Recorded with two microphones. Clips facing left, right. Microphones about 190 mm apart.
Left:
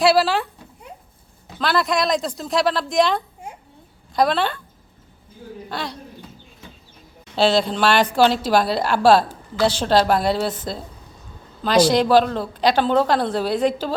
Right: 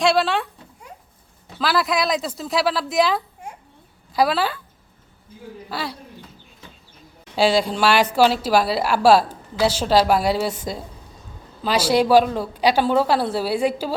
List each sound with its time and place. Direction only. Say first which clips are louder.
0.0 s speech: left 2 dB; centre (ahead or behind)
1.5 s speech: left 1 dB; 5° right (ahead or behind)
5.6 s speech: even; 5° right (ahead or behind)
7.3 s a woman's voice: even; 10° right (ahead or behind)